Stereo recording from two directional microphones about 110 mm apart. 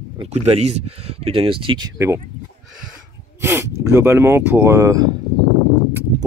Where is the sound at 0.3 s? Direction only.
80° right; by 1.9 s 50° right (ahead or behind).